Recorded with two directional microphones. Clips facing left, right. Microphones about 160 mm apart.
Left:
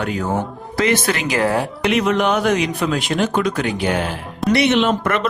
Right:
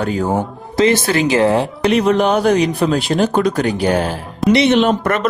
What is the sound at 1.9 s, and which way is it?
Speech, 35° right (ahead or behind).